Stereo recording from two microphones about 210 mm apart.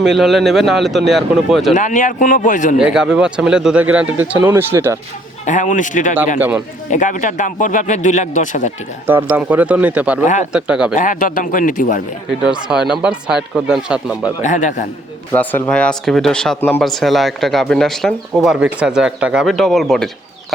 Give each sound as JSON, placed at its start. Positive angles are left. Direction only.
{"t": 0.0, "sound": "speech", "side_deg": 0}
{"t": 1.7, "sound": "speech", "side_deg": 35}
{"t": 2.7, "sound": "speech", "side_deg": -5}
{"t": 5.5, "sound": "speech", "side_deg": 35}
{"t": 9.0, "sound": "speech", "side_deg": -10}
{"t": 10.9, "sound": "speech", "side_deg": 40}
{"t": 13.0, "sound": "speech", "side_deg": -5}
{"t": 14.4, "sound": "speech", "side_deg": 35}
{"t": 15.3, "sound": "speech", "side_deg": 10}